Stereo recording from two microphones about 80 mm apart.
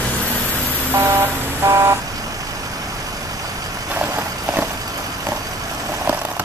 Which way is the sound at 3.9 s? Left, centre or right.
Right.